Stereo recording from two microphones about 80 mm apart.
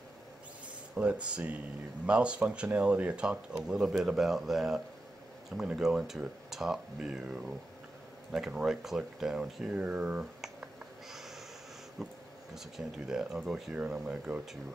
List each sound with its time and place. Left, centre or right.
0.9 s speech: centre
3.6 s speech: centre
8.5 s speech: centre
11.1 s snort: centre
12.0 s speech: centre